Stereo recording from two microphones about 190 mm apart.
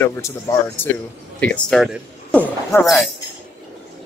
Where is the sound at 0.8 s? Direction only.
10° left (ahead or behind).